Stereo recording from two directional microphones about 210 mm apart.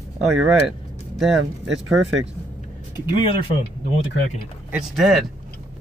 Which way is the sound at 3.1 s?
25° left (ahead or behind).